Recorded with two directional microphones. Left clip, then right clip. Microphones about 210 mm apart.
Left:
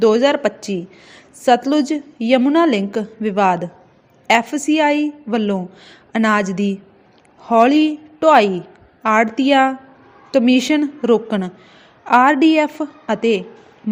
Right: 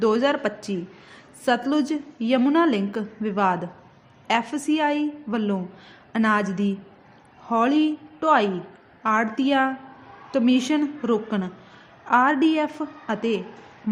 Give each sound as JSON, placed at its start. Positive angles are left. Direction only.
{"t": 0.0, "sound": "a woman's voice", "side_deg": 20}